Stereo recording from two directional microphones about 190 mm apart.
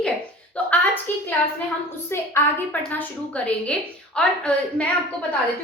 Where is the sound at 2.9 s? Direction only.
5° left (ahead or behind).